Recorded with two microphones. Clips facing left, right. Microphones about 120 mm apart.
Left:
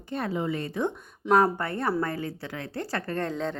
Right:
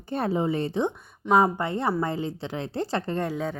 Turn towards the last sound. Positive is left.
turn(degrees=-10)  # may be behind; listen again after turning